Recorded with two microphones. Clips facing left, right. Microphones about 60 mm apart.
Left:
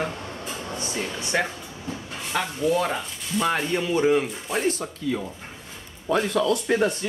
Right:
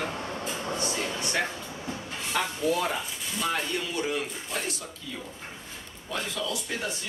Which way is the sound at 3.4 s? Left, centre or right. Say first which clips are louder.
Left 5 dB; left.